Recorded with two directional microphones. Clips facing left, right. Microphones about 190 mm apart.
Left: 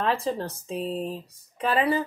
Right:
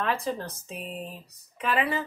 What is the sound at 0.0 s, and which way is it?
A woman's voice, 30° left (ahead or behind).